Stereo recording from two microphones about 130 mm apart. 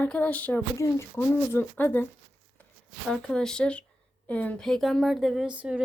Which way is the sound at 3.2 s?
5° left (ahead or behind).